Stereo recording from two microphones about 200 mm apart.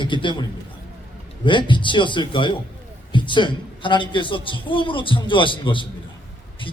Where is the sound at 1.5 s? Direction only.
25° left (ahead or behind).